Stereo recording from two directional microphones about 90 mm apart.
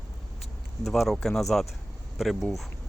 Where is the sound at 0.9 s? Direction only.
5° left (ahead or behind).